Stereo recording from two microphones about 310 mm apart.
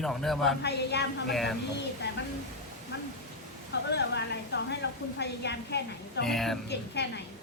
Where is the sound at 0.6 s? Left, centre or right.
Left.